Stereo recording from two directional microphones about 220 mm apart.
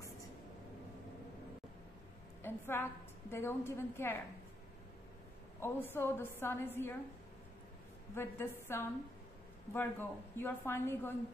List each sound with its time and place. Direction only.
2.4 s a woman's voice: 10° left (ahead or behind)
5.6 s a woman's voice: 10° left (ahead or behind)
8.1 s a woman's voice: 10° left (ahead or behind)